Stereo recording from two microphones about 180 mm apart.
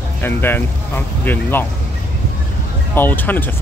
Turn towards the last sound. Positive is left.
turn(degrees=10)  # may be behind; listen again after turning